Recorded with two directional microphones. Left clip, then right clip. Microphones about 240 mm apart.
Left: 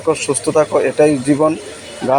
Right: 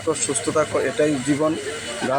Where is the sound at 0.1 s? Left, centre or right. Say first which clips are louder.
Left 7 dB; centre.